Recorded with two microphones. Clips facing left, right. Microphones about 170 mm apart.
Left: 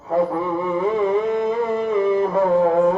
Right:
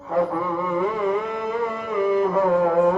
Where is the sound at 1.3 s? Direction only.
25° left (ahead or behind).